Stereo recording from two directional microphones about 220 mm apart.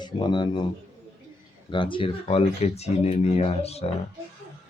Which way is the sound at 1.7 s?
20° left (ahead or behind).